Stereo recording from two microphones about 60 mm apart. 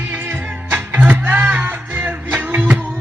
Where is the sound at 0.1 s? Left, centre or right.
Right.